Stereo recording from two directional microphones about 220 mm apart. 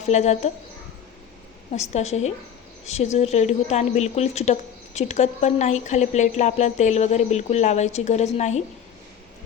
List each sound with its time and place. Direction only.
0.0 s a woman's voice: 30° left (ahead or behind)
1.7 s a woman's voice: 30° left (ahead or behind)